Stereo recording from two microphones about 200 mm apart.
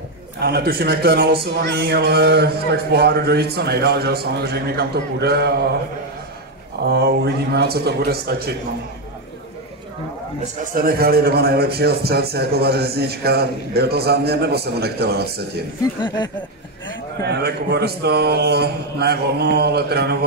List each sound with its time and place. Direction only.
0.4 s a man's voice: 55° right (ahead or behind)
6.9 s a man's voice: 55° right (ahead or behind)
10.4 s a man's voice: 40° right (ahead or behind)
16.0 s speech: 20° left (ahead or behind)
17.2 s a man's voice: 55° right (ahead or behind)